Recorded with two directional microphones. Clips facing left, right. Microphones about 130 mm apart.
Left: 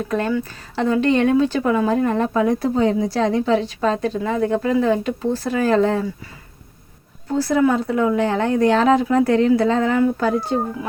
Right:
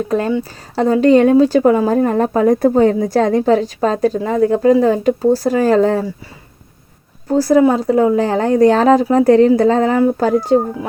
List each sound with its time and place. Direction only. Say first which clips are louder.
0.1 s speech: right 2 dB; 30° right (ahead or behind)
7.3 s speech: right 6 dB; 40° right (ahead or behind)